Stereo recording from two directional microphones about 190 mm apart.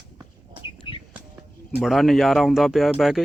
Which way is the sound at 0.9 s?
25° left (ahead or behind).